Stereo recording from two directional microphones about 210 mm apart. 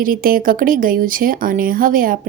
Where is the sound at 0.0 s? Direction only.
40° right (ahead or behind).